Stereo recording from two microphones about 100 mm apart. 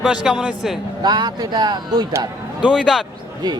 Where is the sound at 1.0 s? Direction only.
45° right (ahead or behind).